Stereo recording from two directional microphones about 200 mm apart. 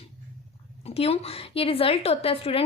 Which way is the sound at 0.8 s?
30° left (ahead or behind).